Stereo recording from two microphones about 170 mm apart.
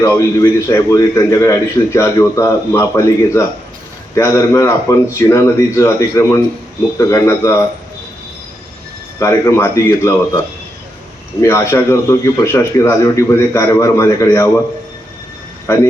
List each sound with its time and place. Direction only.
0.0 s a man's voice: 20° left (ahead or behind)
9.1 s a man's voice: 15° left (ahead or behind)
11.4 s a man's voice: 15° left (ahead or behind)
15.7 s a man's voice: 15° left (ahead or behind)